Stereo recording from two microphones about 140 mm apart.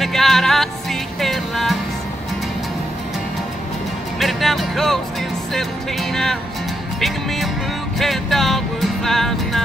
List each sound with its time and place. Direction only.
0.0 s music: centre (ahead or behind)
4.2 s music: centre (ahead or behind)